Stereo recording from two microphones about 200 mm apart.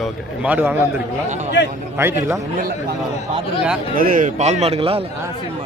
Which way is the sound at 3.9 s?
45° right (ahead or behind).